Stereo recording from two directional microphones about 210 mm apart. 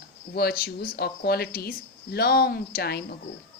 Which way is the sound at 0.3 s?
45° left (ahead or behind).